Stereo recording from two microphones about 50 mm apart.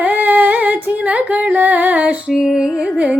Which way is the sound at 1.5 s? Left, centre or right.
Right.